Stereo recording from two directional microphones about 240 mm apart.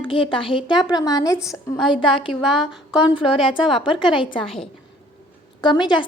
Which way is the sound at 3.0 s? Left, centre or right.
Left.